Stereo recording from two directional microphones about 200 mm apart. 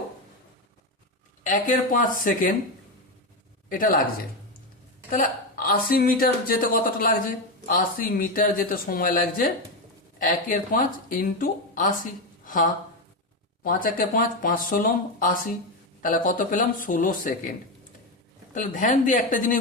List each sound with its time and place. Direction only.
1.5 s speech: 40° left (ahead or behind)
3.7 s speech: 45° left (ahead or behind)
5.1 s speech: 45° left (ahead or behind)
13.7 s speech: 45° left (ahead or behind)
18.5 s speech: 40° left (ahead or behind)